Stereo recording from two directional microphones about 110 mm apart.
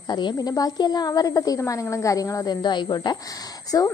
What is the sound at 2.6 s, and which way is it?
Speech, 40° left (ahead or behind).